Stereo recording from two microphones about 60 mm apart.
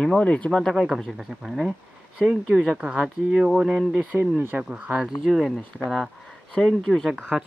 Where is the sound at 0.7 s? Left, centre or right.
Centre.